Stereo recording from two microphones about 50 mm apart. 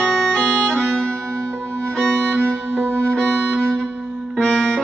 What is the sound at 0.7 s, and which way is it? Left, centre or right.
Music, centre.